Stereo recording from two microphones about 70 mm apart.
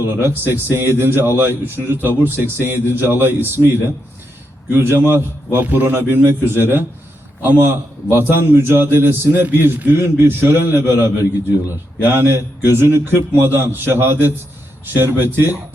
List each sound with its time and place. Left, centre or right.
0.0 s a man's voice: right